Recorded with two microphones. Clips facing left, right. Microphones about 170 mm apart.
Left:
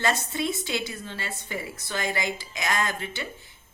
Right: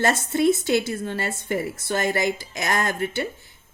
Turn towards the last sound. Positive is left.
turn(degrees=-50)  # may be behind; listen again after turning